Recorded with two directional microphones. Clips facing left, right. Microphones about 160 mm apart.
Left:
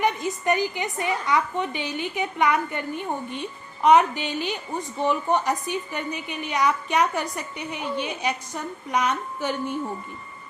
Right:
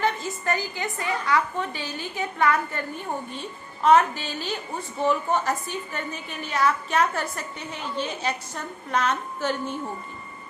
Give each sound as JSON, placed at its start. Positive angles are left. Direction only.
{"t": 0.0, "sound": "a woman's voice", "side_deg": 15}
{"t": 3.8, "sound": "a woman's voice", "side_deg": 15}